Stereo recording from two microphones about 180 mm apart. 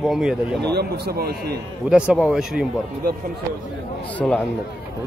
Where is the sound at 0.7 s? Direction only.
60° right (ahead or behind).